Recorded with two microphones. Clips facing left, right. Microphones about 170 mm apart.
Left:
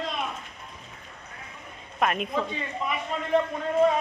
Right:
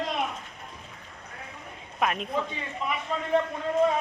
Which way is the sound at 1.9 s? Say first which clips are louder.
Left 2 dB; centre (ahead or behind).